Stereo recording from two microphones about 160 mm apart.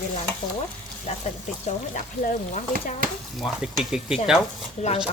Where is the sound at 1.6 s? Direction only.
50° left (ahead or behind).